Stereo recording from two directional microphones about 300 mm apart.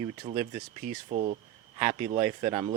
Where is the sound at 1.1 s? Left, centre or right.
Right.